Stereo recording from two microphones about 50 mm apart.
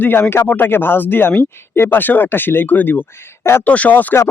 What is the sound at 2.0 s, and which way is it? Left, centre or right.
Speech, left.